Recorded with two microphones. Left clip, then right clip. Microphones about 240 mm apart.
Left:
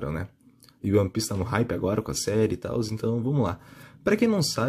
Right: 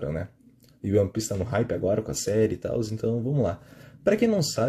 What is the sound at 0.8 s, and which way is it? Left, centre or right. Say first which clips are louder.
Speech: even; left.